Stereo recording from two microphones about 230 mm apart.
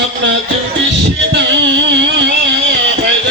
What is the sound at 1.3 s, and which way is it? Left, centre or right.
Music, right.